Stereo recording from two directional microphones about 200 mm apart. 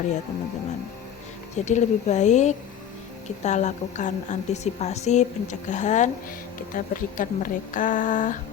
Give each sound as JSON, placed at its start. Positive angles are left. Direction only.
{"t": 1.5, "sound": "a woman's voice", "side_deg": 35}